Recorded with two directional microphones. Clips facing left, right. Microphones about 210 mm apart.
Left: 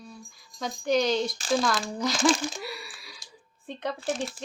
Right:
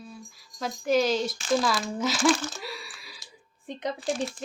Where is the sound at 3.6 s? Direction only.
15° right (ahead or behind).